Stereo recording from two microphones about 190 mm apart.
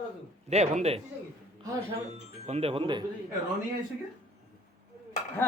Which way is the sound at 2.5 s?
30° right (ahead or behind).